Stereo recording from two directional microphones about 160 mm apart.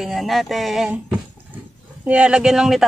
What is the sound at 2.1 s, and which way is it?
Speech, 5° right (ahead or behind).